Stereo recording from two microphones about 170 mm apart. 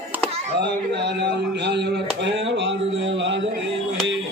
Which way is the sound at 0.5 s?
80° right.